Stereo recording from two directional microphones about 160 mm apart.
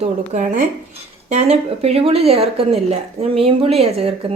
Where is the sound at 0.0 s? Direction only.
50° right (ahead or behind).